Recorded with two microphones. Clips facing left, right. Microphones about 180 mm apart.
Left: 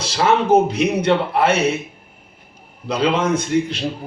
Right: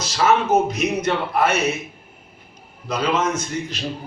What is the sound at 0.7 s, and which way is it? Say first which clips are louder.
Speech: left 4 dB; 30° left (ahead or behind).